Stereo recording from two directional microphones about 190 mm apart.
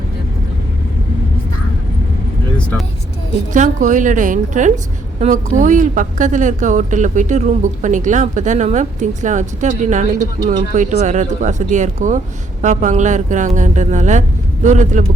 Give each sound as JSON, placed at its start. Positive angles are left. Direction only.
{"t": 3.5, "sound": "speech", "side_deg": -40}